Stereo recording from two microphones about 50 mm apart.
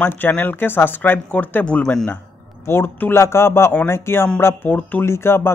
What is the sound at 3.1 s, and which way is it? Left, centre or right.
Speech, left.